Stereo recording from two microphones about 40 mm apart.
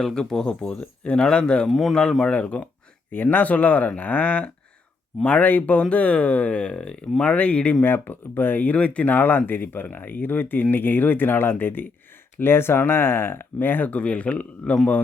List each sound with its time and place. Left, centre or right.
0.0 s speech: centre
1.7 s speech: centre
2.3 s speech: left
3.1 s speech: left
7.3 s speech: left
7.9 s speech: left
9.0 s speech: left
12.4 s speech: left
13.9 s speech: left